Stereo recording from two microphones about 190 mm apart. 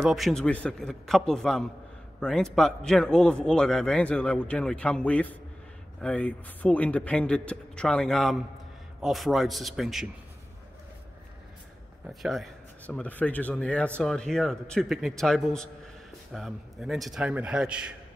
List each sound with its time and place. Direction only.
0.0 s a man's voice: centre (ahead or behind)
12.1 s a man's voice: centre (ahead or behind)